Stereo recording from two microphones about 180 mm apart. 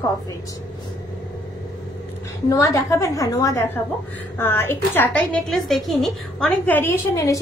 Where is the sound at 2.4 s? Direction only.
15° left (ahead or behind).